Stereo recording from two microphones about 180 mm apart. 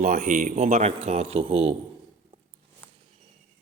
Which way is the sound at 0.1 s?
50° right (ahead or behind).